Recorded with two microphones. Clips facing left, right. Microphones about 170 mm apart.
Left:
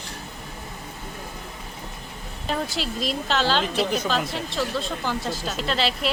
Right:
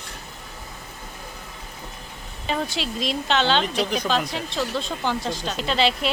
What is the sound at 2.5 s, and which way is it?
Speech, centre (ahead or behind).